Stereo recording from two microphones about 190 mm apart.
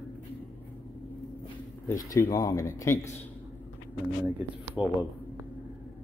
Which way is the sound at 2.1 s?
15° left (ahead or behind).